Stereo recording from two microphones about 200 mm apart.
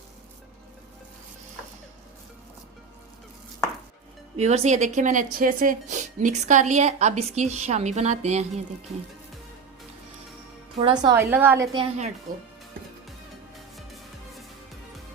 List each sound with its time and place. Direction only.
4.4 s a woman's voice: 35° right (ahead or behind)
10.8 s a woman's voice: 20° right (ahead or behind)